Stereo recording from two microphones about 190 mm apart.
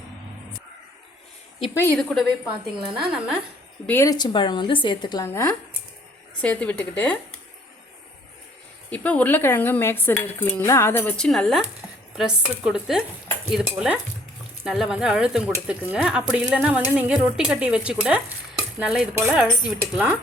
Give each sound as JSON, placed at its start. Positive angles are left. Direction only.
{"t": 1.7, "sound": "speech", "side_deg": 10}
{"t": 3.8, "sound": "speech", "side_deg": 15}
{"t": 8.9, "sound": "speech", "side_deg": 5}